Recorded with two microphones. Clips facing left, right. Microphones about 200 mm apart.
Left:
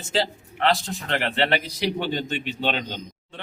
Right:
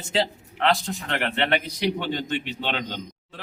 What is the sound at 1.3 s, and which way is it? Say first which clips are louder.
Speech: left 1 dB; 35° left (ahead or behind).